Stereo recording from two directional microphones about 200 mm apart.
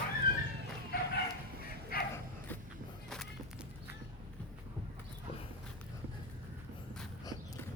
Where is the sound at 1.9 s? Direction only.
45° left (ahead or behind).